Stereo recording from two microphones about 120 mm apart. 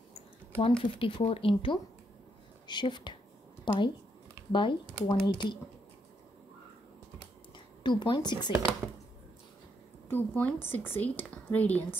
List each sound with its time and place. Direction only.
0.6 s speech: 50° left (ahead or behind)
7.5 s a woman's voice: 40° left (ahead or behind)
10.0 s speech: 15° left (ahead or behind)